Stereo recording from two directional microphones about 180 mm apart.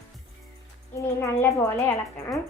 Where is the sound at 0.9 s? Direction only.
15° left (ahead or behind).